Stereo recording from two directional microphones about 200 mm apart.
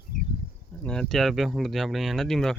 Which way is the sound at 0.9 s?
Centre (ahead or behind).